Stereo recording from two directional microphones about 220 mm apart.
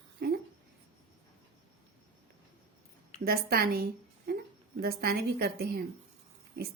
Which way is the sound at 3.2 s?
45° right (ahead or behind).